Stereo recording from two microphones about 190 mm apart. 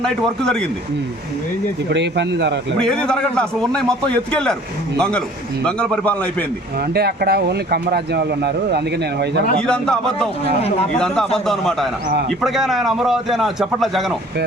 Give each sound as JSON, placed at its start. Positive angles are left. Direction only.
{"t": 0.0, "sound": "a man's voice", "side_deg": 5}
{"t": 1.9, "sound": "speech", "side_deg": -65}
{"t": 2.8, "sound": "a man's voice", "side_deg": 5}
{"t": 6.9, "sound": "speech", "side_deg": -55}
{"t": 9.6, "sound": "a man's voice", "side_deg": 5}
{"t": 10.4, "sound": "speech", "side_deg": 30}
{"t": 10.9, "sound": "a man's voice", "side_deg": 5}